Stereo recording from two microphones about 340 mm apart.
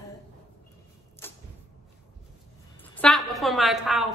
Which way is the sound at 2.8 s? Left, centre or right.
Centre.